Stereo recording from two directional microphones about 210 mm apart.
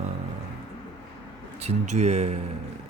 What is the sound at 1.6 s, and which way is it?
Speech, 30° right (ahead or behind).